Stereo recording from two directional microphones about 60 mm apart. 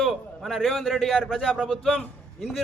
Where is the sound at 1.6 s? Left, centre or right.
Centre.